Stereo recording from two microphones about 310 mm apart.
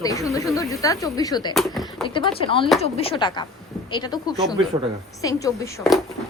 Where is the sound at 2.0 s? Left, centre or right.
Centre.